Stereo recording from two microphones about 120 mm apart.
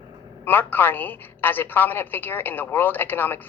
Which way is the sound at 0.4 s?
15° left (ahead or behind).